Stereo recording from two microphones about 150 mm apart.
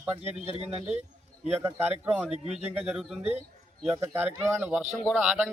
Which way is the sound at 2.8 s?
Centre (ahead or behind).